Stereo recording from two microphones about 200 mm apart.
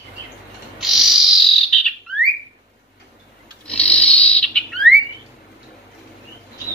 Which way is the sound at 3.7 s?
5° left (ahead or behind).